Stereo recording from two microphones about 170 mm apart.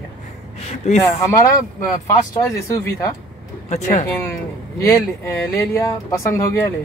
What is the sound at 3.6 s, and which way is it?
Speech, 40° left (ahead or behind).